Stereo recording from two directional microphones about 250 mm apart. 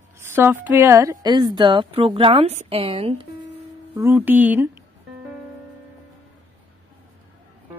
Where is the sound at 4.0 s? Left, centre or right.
Centre.